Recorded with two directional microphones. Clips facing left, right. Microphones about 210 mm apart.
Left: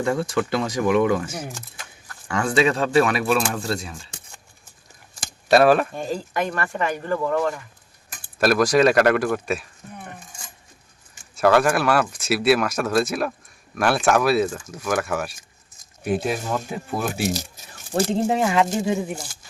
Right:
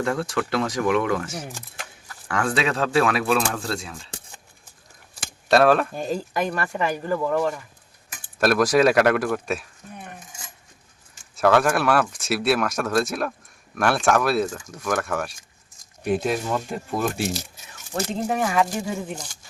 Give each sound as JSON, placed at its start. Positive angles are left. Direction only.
{"t": 0.0, "sound": "speech", "side_deg": 0}
{"t": 5.5, "sound": "speech", "side_deg": 5}
{"t": 11.3, "sound": "speech", "side_deg": 0}
{"t": 17.3, "sound": "speech", "side_deg": 35}
{"t": 19.0, "sound": "speech", "side_deg": 10}